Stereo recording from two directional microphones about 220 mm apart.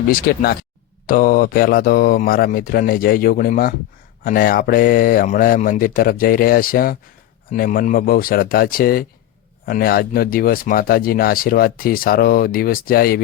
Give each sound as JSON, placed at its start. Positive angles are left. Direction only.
{"t": 0.1, "sound": "speech", "side_deg": 40}